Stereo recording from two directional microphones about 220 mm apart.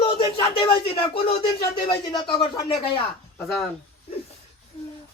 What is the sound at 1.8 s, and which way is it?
Speech, 20° left (ahead or behind).